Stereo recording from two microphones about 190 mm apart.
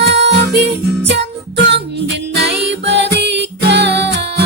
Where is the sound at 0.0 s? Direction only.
65° right (ahead or behind).